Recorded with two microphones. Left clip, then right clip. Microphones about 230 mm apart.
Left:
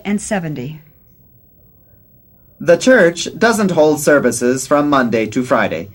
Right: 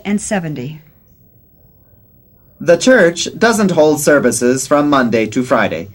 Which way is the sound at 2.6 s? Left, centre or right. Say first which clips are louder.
Right 1 dB; left.